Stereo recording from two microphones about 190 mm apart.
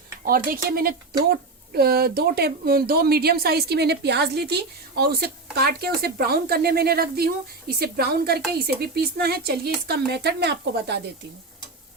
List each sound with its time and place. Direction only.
0.3 s speech: 50° right (ahead or behind)